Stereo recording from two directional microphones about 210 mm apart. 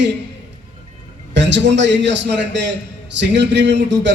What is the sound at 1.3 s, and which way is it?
A man's voice, 55° right (ahead or behind).